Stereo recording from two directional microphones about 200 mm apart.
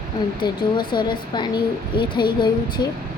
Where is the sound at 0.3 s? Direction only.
20° left (ahead or behind).